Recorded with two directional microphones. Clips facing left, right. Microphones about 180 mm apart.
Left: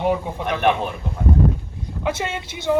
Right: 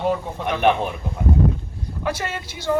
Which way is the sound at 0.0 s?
15° left (ahead or behind).